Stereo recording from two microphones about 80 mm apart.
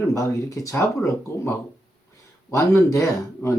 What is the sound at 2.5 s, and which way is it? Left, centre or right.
Speech, left.